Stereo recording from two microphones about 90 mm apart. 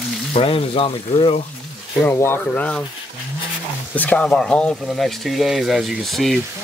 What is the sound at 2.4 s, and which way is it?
Speech, 15° left (ahead or behind).